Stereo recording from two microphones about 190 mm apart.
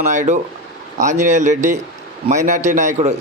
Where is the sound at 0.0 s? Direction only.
40° right (ahead or behind).